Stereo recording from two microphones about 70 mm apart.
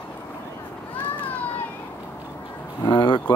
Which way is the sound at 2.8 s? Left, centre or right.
Left.